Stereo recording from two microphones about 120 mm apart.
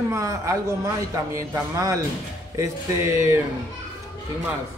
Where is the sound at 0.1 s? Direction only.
25° right (ahead or behind).